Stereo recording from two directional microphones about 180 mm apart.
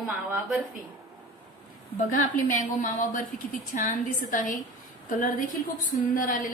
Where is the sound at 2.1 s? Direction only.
45° left (ahead or behind).